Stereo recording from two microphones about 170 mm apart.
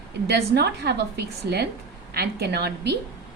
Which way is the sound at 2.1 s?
65° right (ahead or behind).